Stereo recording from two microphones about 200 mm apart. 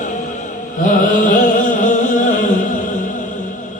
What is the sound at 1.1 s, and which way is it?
Music, 40° left (ahead or behind).